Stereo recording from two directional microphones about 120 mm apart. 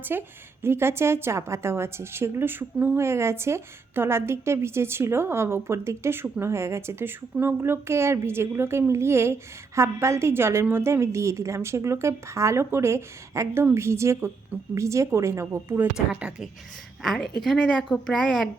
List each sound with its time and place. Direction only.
0.0 s a woman's voice: 20° right (ahead or behind)
17.0 s a woman's voice: 5° left (ahead or behind)